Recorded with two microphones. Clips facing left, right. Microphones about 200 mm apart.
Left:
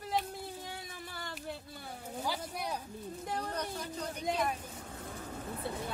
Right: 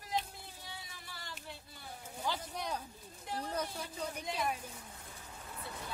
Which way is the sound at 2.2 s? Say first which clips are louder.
Left 1 dB; 10° left (ahead or behind).